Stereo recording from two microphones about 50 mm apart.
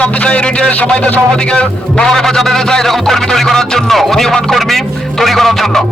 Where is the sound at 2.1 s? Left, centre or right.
Centre.